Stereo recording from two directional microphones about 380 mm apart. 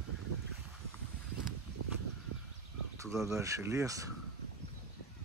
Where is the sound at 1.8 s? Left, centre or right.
Right.